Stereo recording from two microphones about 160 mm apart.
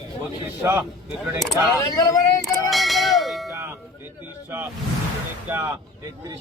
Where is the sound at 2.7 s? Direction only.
Centre (ahead or behind).